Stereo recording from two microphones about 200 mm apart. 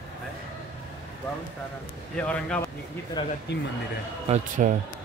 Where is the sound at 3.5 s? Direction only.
55° left (ahead or behind).